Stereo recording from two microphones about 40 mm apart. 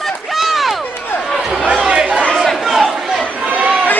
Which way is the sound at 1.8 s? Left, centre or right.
Right.